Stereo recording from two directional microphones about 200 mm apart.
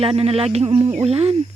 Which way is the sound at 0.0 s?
30° right (ahead or behind).